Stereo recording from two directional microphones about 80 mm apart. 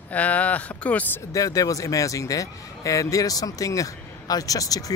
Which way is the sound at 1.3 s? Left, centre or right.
Left.